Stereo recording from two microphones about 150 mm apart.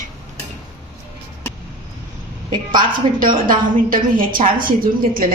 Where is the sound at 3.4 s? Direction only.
65° right (ahead or behind).